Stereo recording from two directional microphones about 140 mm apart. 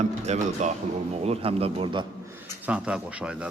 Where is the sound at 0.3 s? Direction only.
55° right (ahead or behind).